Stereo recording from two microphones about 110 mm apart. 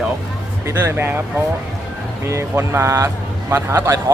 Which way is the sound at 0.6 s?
20° right (ahead or behind).